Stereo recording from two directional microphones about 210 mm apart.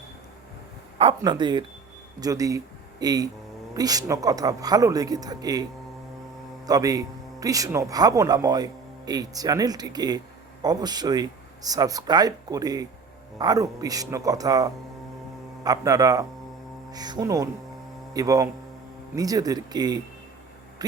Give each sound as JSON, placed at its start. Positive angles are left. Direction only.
{"t": 0.9, "sound": "a man's voice", "side_deg": -25}
{"t": 6.7, "sound": "a man's voice", "side_deg": -15}